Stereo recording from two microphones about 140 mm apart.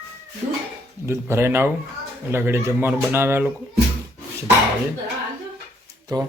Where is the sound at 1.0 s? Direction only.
20° right (ahead or behind).